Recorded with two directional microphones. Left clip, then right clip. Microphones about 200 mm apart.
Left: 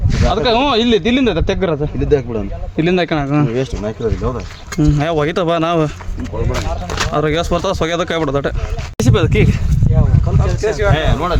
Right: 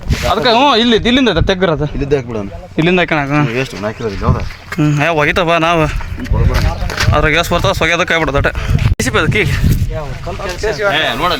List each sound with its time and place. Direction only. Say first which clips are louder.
0.1 s speech: right 3 dB; 30° right (ahead or behind)
3.1 s speech: right 3 dB; 10° left (ahead or behind)
4.8 s speech: right 3 dB; centre (ahead or behind)
10.4 s speech: right 2 dB; 40° left (ahead or behind)